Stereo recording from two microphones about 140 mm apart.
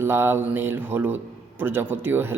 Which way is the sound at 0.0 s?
15° right (ahead or behind).